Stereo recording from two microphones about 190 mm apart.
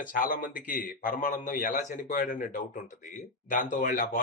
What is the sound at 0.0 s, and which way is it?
A man's voice, 45° left (ahead or behind).